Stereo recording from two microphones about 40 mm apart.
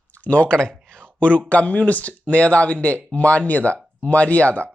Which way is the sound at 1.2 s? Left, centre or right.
Left.